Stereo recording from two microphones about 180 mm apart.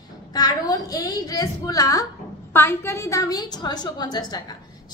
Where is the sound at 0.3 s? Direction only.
20° left (ahead or behind).